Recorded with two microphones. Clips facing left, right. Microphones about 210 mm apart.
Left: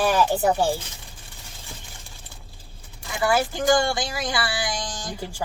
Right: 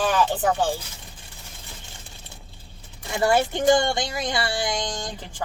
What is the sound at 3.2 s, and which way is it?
Speech, 25° right (ahead or behind).